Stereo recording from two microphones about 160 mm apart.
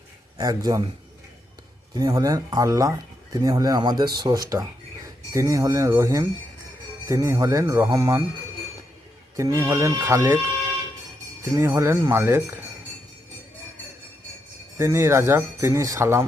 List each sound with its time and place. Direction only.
0.3 s speech: 20° right (ahead or behind)
2.0 s speech: 20° right (ahead or behind)
9.4 s speech: 20° right (ahead or behind)
11.5 s speech: 15° right (ahead or behind)
14.8 s speech: 15° right (ahead or behind)